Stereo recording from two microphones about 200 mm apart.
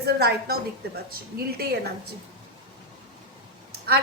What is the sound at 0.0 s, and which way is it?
Speech, 55° right (ahead or behind).